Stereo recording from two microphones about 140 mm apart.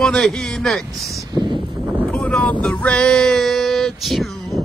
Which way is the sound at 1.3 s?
35° right (ahead or behind).